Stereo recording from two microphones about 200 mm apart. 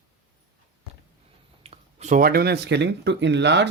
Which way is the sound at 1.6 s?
30° right (ahead or behind).